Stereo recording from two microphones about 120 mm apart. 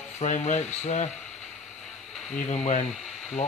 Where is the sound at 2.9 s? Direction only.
Centre (ahead or behind).